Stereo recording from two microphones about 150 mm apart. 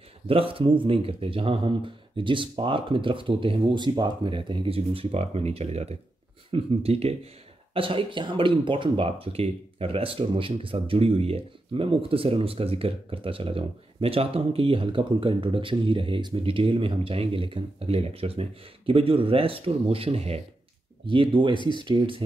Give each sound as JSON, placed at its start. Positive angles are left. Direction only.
{"t": 0.3, "sound": "speech", "side_deg": -35}
{"t": 21.5, "sound": "speech", "side_deg": 30}
{"t": 21.8, "sound": "speech", "side_deg": -35}